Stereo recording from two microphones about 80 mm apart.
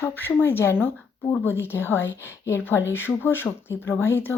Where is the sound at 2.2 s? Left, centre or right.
Left.